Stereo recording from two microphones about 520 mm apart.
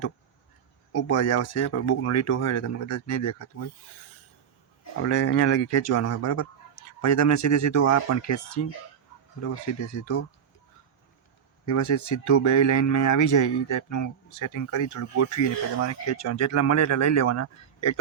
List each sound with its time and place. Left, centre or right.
0.9 s speech: left
5.0 s speech: left
11.6 s speech: left